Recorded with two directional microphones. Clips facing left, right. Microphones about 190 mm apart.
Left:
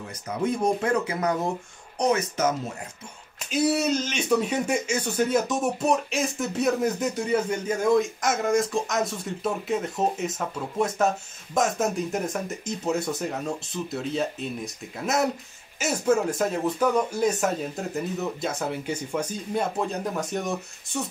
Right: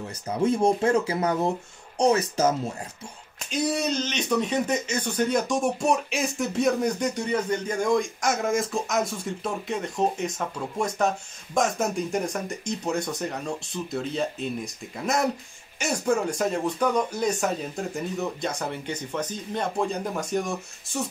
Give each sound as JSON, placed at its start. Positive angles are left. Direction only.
{"t": 0.4, "sound": "speech", "side_deg": -30}
{"t": 3.3, "sound": "speech", "side_deg": 5}